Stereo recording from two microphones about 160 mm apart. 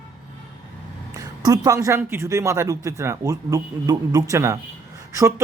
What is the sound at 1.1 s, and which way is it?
A man's voice, 25° right (ahead or behind).